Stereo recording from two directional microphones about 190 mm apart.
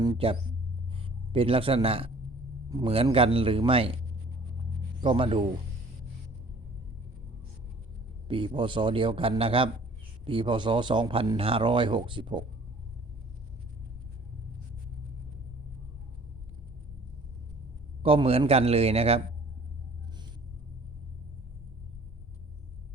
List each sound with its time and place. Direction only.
0.0 s a man's voice: 25° right (ahead or behind)
2.6 s a man's voice: 20° right (ahead or behind)
2.9 s speech: 30° right (ahead or behind)
8.3 s speech: 25° right (ahead or behind)
18.0 s a man's voice: 30° right (ahead or behind)